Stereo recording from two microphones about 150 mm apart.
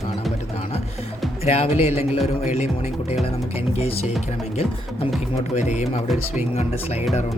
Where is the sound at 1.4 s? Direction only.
45° left (ahead or behind).